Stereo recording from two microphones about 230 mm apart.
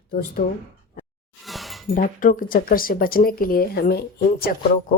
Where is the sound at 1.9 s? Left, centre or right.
Left.